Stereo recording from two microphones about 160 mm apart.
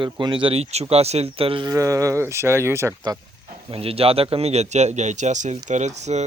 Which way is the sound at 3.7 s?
35° right (ahead or behind).